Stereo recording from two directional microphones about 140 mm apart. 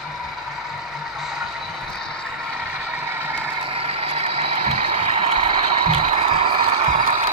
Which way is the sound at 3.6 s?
45° right (ahead or behind).